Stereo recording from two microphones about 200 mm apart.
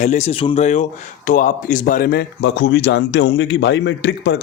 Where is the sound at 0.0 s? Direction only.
35° left (ahead or behind).